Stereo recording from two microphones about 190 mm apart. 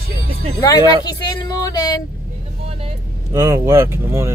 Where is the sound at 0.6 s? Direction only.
20° left (ahead or behind).